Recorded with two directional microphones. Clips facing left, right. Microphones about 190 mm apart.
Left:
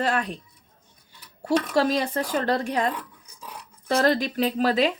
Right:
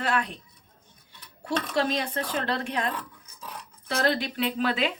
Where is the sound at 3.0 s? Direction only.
10° left (ahead or behind).